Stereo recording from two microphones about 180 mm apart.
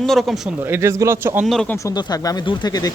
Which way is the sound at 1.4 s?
5° left (ahead or behind).